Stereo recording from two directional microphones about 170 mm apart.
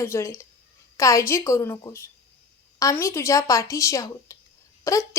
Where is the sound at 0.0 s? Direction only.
15° left (ahead or behind).